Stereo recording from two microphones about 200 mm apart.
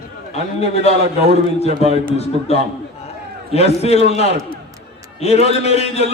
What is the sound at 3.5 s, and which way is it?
A man's voice, 30° left (ahead or behind).